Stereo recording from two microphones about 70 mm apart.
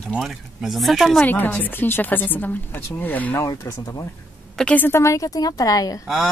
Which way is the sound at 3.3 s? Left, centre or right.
Left.